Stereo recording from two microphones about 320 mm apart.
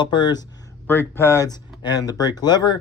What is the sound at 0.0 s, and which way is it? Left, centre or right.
Speech, centre.